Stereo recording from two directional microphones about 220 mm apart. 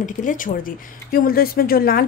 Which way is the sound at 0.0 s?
35° left (ahead or behind).